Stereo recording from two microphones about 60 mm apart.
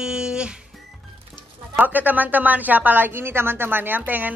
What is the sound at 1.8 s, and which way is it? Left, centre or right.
A woman's voice, right.